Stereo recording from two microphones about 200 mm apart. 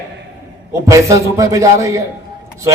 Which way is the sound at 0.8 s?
15° right (ahead or behind).